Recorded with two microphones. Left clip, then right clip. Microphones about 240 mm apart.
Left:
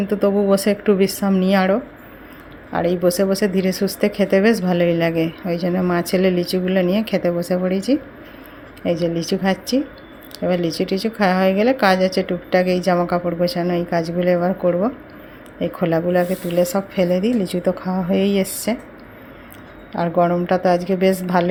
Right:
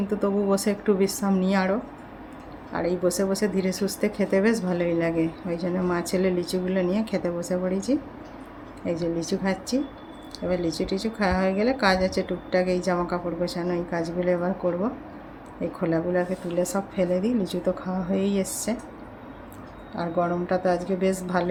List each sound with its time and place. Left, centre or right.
0.1 s speech: left
20.0 s speech: centre